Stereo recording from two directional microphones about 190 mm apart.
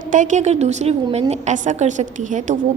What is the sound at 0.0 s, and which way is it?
A woman's voice, 40° right (ahead or behind).